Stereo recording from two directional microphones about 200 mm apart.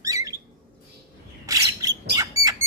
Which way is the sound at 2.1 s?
15° right (ahead or behind).